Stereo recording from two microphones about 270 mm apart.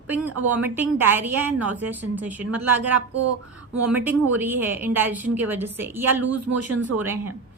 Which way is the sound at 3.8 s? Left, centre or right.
Centre.